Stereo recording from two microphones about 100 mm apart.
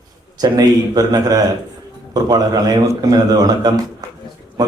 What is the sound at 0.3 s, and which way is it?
A man's voice, 40° right (ahead or behind).